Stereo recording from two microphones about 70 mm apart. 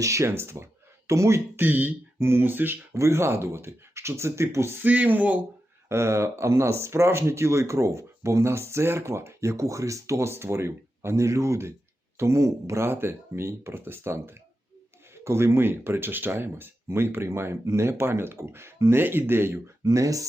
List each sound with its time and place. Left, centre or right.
0.0 s speech: right
1.5 s speech: right
2.9 s speech: right
4.9 s speech: right
5.9 s speech: right